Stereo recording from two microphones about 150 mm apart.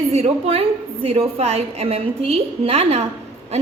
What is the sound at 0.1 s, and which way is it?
A woman's voice, 45° right (ahead or behind).